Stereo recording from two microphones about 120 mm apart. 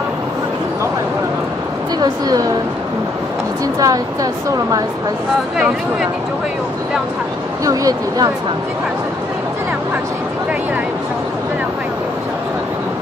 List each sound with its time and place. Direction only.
2.0 s a woman's voice: 35° right (ahead or behind)
3.8 s a woman's voice: 30° right (ahead or behind)
7.6 s a woman's voice: 30° right (ahead or behind)